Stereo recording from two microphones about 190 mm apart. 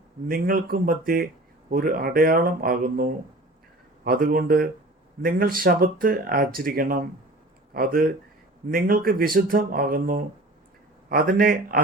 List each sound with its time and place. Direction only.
0.3 s speech: 50° right (ahead or behind)